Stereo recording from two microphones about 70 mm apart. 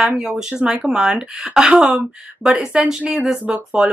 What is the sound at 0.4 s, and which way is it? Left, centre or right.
Speech, centre.